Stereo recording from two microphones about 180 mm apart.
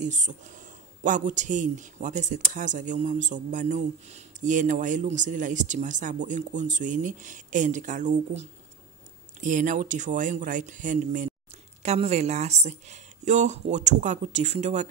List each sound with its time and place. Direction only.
0.0 s a woman's voice: 45° right (ahead or behind)